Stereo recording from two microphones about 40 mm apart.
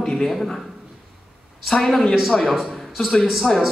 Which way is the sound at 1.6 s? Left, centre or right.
Centre.